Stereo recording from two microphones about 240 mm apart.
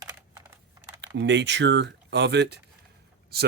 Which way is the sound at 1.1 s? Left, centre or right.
Right.